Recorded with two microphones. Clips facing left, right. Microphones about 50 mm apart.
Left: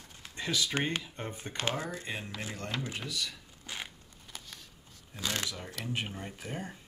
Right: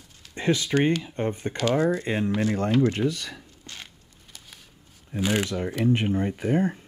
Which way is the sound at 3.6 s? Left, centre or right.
Centre.